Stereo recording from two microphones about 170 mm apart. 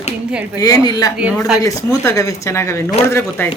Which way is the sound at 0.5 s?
20° left (ahead or behind).